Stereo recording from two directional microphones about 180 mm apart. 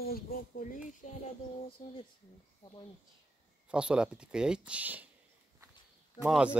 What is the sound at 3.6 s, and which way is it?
Speech, 5° right (ahead or behind).